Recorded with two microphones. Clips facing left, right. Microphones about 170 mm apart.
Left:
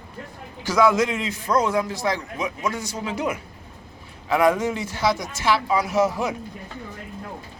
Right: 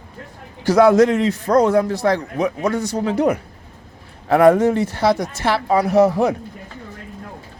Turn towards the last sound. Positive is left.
turn(degrees=-60)  # may be behind; listen again after turning